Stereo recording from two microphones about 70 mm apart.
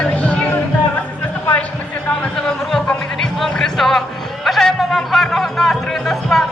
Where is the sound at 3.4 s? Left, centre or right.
Centre.